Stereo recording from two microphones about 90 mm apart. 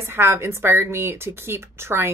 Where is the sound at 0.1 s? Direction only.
30° right (ahead or behind).